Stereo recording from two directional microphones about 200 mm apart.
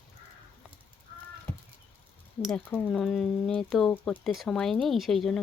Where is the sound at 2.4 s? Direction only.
5° left (ahead or behind).